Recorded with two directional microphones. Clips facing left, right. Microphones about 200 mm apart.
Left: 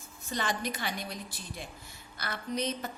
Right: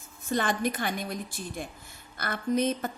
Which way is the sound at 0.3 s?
50° right (ahead or behind).